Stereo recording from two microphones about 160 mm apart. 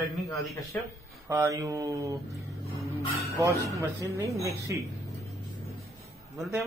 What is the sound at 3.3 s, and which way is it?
Speech, 20° right (ahead or behind).